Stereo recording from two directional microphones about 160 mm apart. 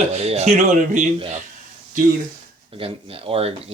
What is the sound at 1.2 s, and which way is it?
Speech, 40° right (ahead or behind).